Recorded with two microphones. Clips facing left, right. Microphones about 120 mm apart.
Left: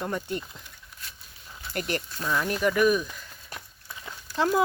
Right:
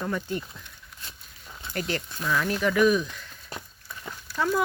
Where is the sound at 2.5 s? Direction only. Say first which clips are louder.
Right 1 dB; 10° left (ahead or behind).